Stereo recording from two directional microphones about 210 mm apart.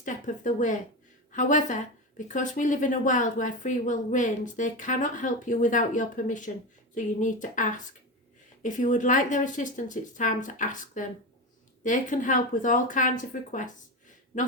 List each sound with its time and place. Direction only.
0.0 s a woman's voice: 35° left (ahead or behind)
14.3 s a woman's voice: 40° left (ahead or behind)